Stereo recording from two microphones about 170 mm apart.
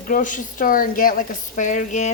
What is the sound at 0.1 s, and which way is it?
Speech, 50° left (ahead or behind).